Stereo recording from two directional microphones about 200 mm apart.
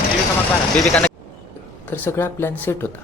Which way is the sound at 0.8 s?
5° left (ahead or behind).